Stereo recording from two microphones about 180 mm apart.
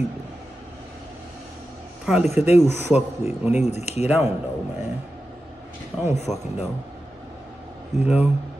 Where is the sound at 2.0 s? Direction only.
5° right (ahead or behind).